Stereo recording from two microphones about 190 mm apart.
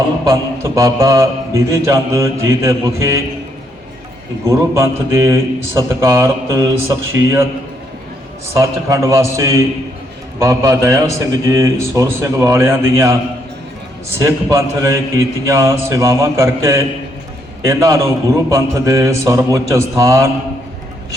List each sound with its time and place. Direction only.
0.3 s a man's voice: 15° right (ahead or behind)
4.4 s a man's voice: 15° right (ahead or behind)
8.5 s a man's voice: 15° right (ahead or behind)
14.2 s a man's voice: 15° right (ahead or behind)